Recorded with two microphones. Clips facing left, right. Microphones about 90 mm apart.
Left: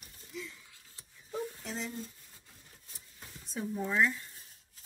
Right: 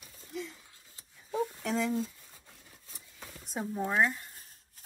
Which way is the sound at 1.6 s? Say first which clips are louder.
Right 9 dB; 90° right.